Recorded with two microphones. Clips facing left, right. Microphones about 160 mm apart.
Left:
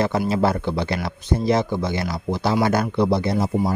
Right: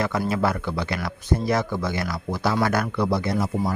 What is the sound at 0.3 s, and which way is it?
Speech, 30° left (ahead or behind).